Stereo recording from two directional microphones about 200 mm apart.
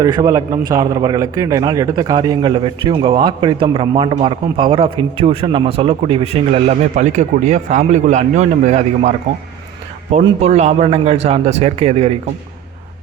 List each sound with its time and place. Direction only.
0.0 s a man's voice: 15° right (ahead or behind)